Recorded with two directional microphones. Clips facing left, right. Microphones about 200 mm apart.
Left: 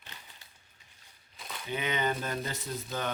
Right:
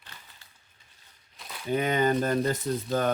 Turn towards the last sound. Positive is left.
turn(degrees=-50)  # may be behind; listen again after turning